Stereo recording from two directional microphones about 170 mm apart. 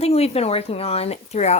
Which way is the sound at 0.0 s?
35° left (ahead or behind).